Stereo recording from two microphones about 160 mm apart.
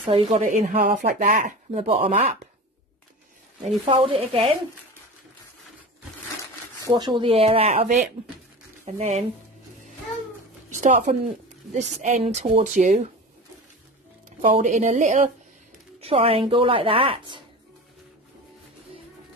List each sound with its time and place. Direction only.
0.0 s a woman's voice: 35° right (ahead or behind)
0.4 s speech: 50° right (ahead or behind); by 1.5 s 70° right (ahead or behind)
1.7 s speech: 50° right (ahead or behind)
3.8 s a woman's voice: 35° right (ahead or behind)
6.9 s a woman's voice: 30° right (ahead or behind); by 9.2 s 45° right (ahead or behind)
10.7 s speech: 50° right (ahead or behind)
14.4 s speech: 50° right (ahead or behind)
16.0 s a woman's voice: 35° right (ahead or behind)